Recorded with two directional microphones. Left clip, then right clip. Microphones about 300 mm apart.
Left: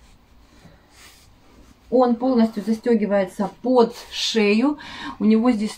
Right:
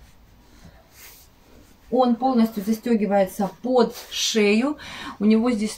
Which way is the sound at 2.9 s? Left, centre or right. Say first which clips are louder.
Left 1 dB; centre.